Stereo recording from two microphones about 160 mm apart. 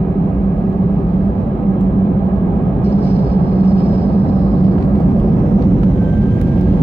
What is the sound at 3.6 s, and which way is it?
Vehicle, 35° right (ahead or behind).